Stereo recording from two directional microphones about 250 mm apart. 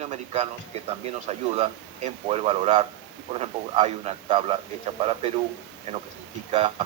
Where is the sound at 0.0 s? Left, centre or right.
Right.